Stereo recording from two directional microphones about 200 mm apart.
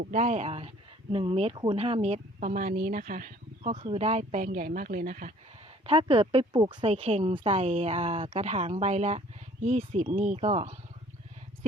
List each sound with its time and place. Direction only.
0.1 s speech: 35° right (ahead or behind)
5.8 s speech: 30° right (ahead or behind)